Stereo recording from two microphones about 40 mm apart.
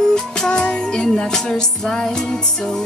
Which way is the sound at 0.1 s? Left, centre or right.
Centre.